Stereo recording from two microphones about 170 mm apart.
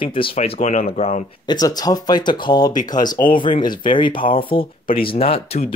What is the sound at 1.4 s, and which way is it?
Speech, 25° left (ahead or behind).